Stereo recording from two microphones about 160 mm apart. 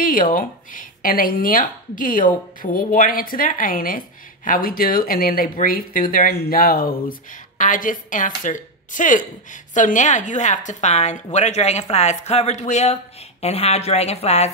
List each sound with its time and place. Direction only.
0.0 s speech: 60° left (ahead or behind)
6.1 s speech: 75° left (ahead or behind); by 14.5 s 40° left (ahead or behind)